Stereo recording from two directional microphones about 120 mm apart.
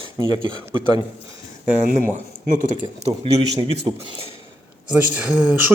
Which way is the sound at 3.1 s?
60° right (ahead or behind).